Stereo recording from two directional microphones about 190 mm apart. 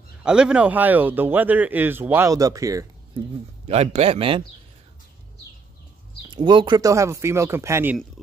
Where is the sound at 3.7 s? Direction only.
35° right (ahead or behind).